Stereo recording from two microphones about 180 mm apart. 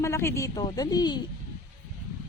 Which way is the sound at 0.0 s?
15° left (ahead or behind).